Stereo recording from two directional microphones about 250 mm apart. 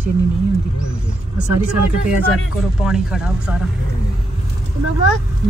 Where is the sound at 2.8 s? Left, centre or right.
Centre.